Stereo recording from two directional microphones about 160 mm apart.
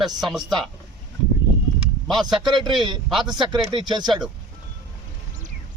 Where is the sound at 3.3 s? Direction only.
30° right (ahead or behind).